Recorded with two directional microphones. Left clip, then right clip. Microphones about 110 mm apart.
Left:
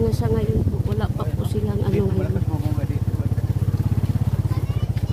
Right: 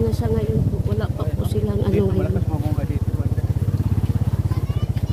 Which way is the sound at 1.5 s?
5° right (ahead or behind).